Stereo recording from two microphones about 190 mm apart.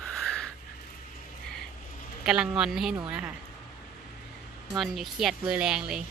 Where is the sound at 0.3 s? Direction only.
5° left (ahead or behind).